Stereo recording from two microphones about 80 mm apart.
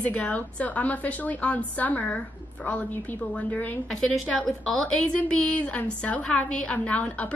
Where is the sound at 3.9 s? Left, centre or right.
Centre.